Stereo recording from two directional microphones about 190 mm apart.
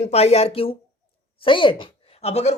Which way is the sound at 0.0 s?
35° left (ahead or behind).